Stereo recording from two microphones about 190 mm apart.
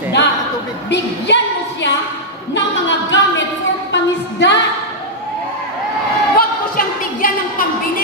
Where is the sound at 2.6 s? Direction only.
70° left (ahead or behind).